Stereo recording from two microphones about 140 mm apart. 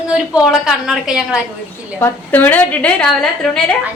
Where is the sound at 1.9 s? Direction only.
15° left (ahead or behind).